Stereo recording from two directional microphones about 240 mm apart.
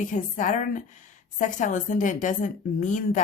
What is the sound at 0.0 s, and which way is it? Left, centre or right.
Speech, left.